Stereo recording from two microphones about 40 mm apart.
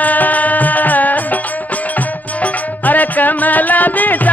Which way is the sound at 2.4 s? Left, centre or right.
Left.